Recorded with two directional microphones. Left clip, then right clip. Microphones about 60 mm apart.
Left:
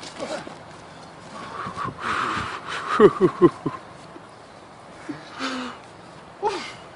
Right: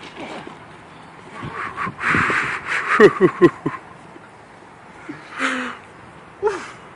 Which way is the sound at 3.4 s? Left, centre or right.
Centre.